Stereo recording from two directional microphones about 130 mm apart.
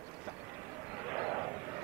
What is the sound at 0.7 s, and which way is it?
Vehicle, 15° right (ahead or behind).